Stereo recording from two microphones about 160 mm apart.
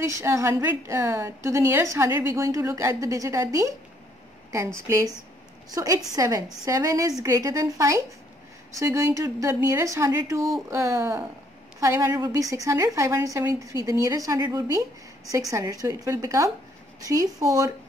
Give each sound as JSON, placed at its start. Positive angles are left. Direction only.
{"t": 0.0, "sound": "a woman's voice", "side_deg": -20}
{"t": 4.7, "sound": "a woman's voice", "side_deg": -15}